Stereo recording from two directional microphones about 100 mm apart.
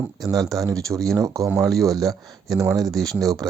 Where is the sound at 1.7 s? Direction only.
Centre (ahead or behind).